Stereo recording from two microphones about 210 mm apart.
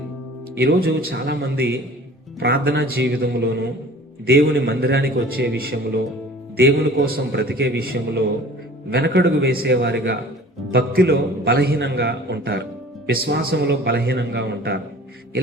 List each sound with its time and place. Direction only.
0.6 s a man's voice: 50° right (ahead or behind)
8.9 s a man's voice: 50° right (ahead or behind)